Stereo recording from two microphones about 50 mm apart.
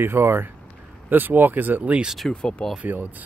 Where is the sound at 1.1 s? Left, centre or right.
Right.